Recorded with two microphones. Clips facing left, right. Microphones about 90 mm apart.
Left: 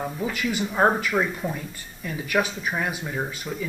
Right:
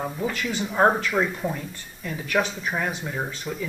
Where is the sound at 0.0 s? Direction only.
5° right (ahead or behind).